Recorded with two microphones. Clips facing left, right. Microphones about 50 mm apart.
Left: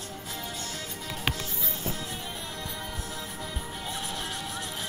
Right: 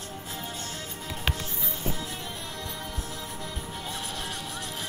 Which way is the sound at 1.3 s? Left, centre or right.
Centre.